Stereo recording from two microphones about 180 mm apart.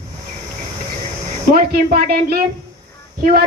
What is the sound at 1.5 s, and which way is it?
A man's voice, 55° right (ahead or behind).